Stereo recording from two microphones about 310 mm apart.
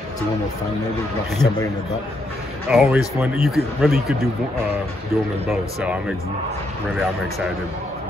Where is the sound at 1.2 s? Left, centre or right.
Centre.